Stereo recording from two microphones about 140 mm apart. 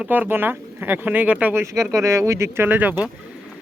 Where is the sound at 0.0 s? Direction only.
10° right (ahead or behind).